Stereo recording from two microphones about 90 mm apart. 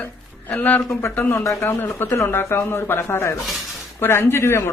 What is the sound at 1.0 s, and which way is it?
A man's voice, 30° left (ahead or behind).